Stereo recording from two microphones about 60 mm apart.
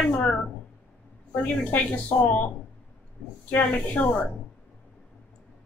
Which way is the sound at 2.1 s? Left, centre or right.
Left.